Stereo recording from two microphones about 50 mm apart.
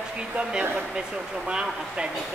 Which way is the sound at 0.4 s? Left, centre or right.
Right.